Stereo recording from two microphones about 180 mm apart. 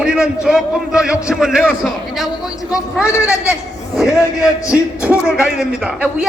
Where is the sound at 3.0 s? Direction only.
15° left (ahead or behind).